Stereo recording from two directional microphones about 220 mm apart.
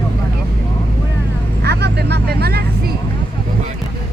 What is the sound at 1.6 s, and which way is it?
Speech, 50° right (ahead or behind).